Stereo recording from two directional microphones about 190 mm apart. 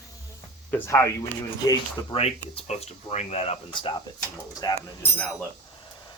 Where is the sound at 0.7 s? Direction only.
15° left (ahead or behind).